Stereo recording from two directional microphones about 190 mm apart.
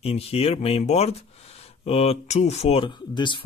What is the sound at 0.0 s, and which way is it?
Speech, 30° left (ahead or behind).